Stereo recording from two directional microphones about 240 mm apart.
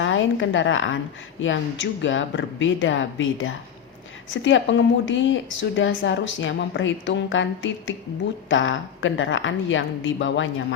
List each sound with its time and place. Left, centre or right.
0.0 s a woman's voice: left